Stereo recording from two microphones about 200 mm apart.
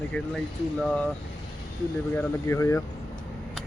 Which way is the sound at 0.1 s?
5° left (ahead or behind).